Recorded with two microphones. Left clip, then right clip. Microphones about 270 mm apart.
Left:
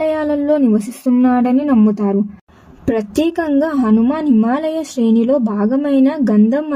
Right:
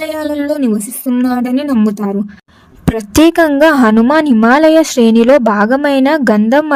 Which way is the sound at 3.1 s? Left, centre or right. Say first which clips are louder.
Right 11 dB; right.